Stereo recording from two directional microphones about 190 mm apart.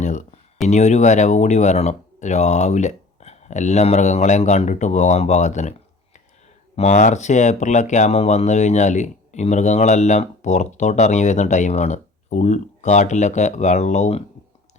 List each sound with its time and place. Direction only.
0.0 s a sound: 40° left (ahead or behind)
0.7 s speech: 40° left (ahead or behind)
6.7 s speech: 35° left (ahead or behind)